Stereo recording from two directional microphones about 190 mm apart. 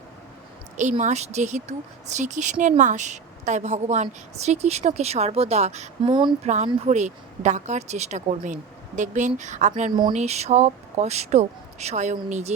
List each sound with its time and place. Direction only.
0.8 s speech: 40° right (ahead or behind)
6.1 s speech: 25° right (ahead or behind)
6.5 s speech: 35° right (ahead or behind)